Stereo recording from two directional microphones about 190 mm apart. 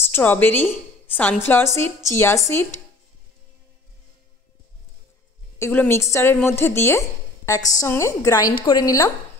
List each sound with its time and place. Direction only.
0.0 s a woman's voice: 10° left (ahead or behind)
5.6 s a woman's voice: 10° left (ahead or behind)